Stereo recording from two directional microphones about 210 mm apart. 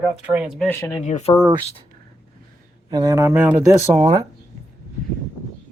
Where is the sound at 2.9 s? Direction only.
15° right (ahead or behind).